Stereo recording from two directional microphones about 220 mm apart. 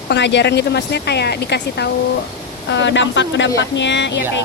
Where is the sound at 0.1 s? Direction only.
50° left (ahead or behind).